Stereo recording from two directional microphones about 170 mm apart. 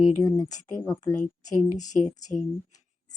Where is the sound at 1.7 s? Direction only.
45° left (ahead or behind).